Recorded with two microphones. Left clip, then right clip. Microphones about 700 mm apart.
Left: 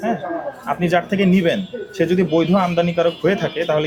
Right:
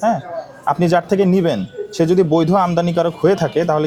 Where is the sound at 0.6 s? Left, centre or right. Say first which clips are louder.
Right 4 dB; right.